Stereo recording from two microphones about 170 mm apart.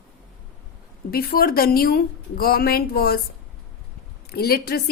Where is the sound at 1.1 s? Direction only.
60° left (ahead or behind).